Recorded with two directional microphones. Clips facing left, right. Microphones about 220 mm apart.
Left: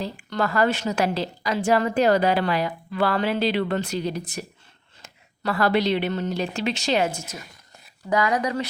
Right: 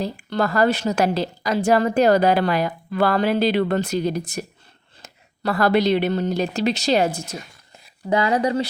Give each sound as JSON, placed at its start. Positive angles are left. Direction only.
{"t": 0.0, "sound": "a woman's voice", "side_deg": -40}